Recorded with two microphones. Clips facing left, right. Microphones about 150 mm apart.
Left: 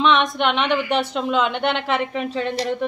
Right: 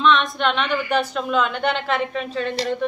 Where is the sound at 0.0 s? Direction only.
20° left (ahead or behind).